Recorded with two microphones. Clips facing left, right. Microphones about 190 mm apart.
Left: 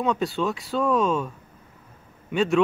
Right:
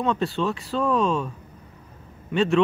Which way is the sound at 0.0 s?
Centre (ahead or behind).